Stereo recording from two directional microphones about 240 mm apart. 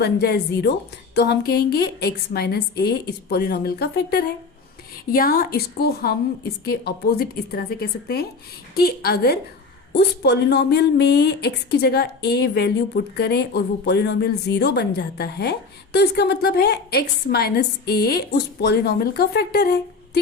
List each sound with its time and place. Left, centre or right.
0.0 s a woman's voice: left